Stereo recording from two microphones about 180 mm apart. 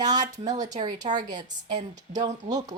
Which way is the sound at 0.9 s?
40° right (ahead or behind).